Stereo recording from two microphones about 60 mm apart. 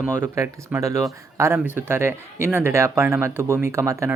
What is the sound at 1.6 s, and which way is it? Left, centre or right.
Speech, right.